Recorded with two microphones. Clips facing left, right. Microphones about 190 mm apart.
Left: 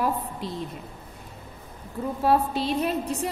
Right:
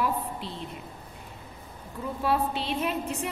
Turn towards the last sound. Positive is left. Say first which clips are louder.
# left 4 dB
turn(degrees=35)  # may be behind; listen again after turning